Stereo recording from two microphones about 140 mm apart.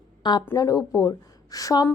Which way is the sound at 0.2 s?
30° left (ahead or behind).